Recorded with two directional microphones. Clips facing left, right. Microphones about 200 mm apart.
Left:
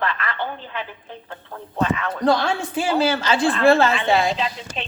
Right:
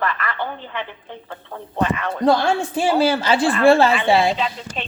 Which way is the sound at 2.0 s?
25° right (ahead or behind).